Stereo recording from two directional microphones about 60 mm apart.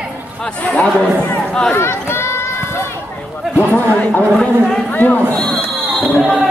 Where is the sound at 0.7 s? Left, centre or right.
Left.